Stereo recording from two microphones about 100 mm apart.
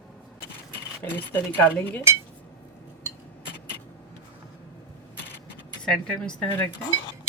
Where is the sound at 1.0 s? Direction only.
20° left (ahead or behind).